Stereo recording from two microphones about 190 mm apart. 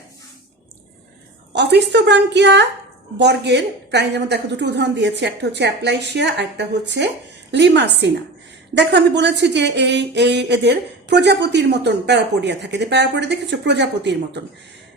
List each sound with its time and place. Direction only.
1.5 s speech: 65° right (ahead or behind)